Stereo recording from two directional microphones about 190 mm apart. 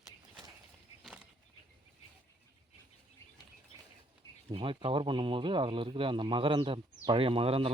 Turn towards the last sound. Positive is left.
turn(degrees=-30)  # may be behind; listen again after turning